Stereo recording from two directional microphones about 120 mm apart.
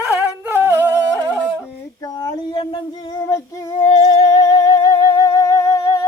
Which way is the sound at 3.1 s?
30° left (ahead or behind).